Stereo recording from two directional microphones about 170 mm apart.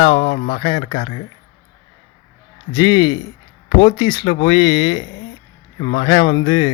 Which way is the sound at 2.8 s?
30° left (ahead or behind).